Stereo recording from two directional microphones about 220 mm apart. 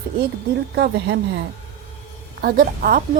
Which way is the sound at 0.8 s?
55° right (ahead or behind).